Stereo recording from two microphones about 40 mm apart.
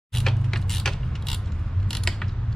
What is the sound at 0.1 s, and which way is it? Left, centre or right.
Mechanisms, centre.